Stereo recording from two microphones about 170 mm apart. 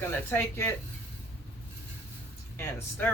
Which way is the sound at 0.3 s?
15° left (ahead or behind).